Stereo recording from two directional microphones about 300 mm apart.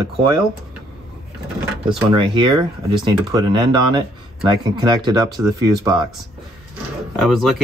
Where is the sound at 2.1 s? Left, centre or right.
Centre.